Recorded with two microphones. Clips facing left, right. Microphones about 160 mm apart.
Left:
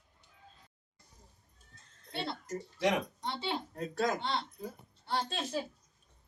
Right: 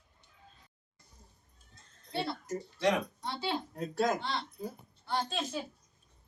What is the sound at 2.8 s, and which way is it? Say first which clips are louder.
Speech: right 1 dB; 20° left (ahead or behind).